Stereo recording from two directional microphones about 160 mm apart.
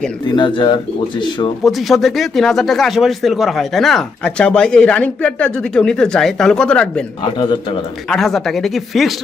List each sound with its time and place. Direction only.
0.3 s speech: 30° left (ahead or behind)
1.6 s speech: centre (ahead or behind)
8.1 s speech: centre (ahead or behind)